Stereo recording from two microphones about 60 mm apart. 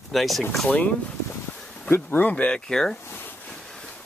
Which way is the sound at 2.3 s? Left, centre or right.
Centre.